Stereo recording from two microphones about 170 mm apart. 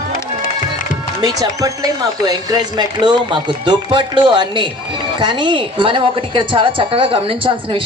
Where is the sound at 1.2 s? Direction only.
20° right (ahead or behind).